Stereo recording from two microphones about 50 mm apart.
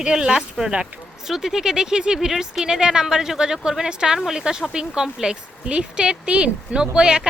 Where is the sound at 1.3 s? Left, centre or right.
Centre.